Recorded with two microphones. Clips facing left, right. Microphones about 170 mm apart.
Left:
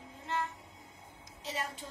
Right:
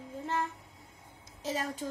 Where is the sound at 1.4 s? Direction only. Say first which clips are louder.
Right 6 dB; 45° right (ahead or behind).